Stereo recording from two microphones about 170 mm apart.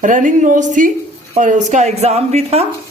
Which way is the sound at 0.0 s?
50° right (ahead or behind).